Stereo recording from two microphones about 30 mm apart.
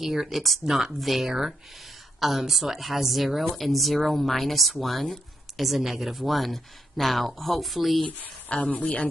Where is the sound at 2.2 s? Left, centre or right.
Centre.